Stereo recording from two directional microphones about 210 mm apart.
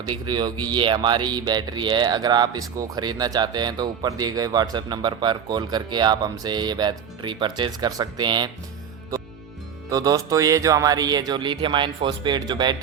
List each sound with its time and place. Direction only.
0.0 s speech: 20° right (ahead or behind)
9.9 s speech: 20° right (ahead or behind)